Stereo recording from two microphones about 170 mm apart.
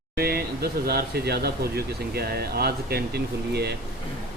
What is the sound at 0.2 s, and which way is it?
Speech, 65° right (ahead or behind).